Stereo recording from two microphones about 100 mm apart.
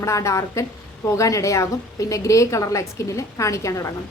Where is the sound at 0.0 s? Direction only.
30° left (ahead or behind).